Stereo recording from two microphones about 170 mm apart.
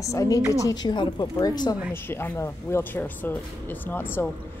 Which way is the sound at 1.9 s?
15° left (ahead or behind).